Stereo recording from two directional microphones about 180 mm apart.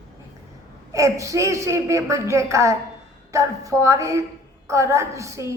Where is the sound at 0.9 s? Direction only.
15° right (ahead or behind).